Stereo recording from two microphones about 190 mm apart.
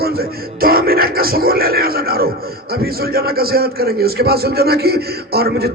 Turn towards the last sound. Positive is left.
turn(degrees=-55)  # may be behind; listen again after turning